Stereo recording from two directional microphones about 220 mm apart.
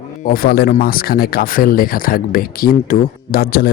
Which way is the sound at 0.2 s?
40° left (ahead or behind).